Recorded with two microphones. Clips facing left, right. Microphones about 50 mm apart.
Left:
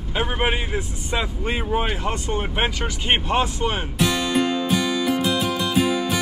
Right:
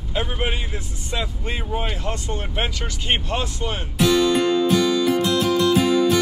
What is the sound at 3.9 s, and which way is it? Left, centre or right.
Music, centre.